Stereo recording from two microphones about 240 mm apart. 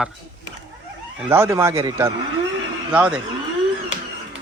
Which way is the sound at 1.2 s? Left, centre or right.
Centre.